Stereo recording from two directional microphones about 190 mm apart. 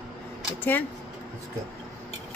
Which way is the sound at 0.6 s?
10° left (ahead or behind).